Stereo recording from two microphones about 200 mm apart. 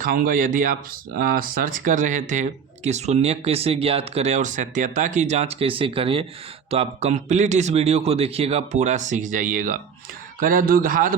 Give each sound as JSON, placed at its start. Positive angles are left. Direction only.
{"t": 0.0, "sound": "speech", "side_deg": -45}